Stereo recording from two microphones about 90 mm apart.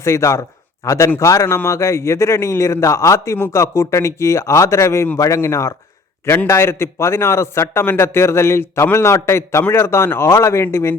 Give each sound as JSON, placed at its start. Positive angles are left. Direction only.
{"t": 0.0, "sound": "a man's voice", "side_deg": 30}